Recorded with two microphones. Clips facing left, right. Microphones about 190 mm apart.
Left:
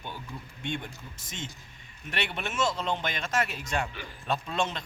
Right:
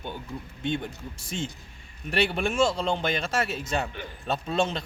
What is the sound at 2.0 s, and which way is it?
Speech, 35° right (ahead or behind).